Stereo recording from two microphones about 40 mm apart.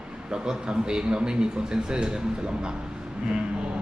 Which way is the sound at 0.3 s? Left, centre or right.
Right.